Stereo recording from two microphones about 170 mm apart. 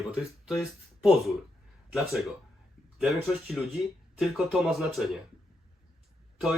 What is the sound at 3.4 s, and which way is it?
Speech, centre (ahead or behind).